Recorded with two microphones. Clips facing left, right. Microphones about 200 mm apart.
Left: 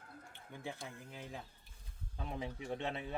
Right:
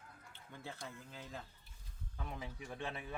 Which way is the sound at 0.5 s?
15° left (ahead or behind).